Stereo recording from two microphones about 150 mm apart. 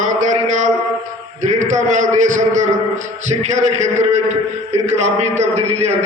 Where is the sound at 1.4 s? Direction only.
55° right (ahead or behind).